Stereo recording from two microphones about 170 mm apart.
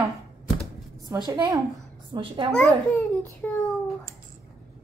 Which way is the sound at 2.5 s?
10° left (ahead or behind).